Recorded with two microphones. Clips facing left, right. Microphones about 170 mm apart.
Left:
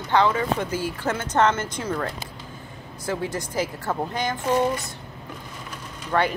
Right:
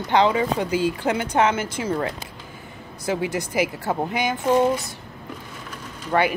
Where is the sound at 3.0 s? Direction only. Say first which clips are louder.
Right 3 dB; 15° right (ahead or behind).